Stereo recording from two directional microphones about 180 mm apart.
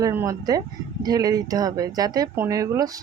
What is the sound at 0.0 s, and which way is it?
A woman's voice, 15° right (ahead or behind).